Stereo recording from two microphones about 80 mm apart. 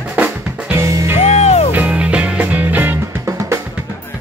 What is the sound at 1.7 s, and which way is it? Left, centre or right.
Music, centre.